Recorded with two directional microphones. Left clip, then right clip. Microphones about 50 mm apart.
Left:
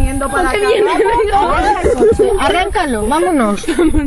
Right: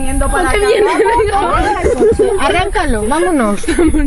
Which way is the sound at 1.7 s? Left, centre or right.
Left.